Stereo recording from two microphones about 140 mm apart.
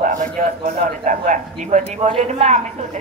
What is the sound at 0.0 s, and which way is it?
A man's voice, 70° right (ahead or behind).